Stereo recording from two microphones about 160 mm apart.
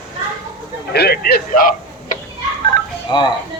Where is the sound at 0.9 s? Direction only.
80° left.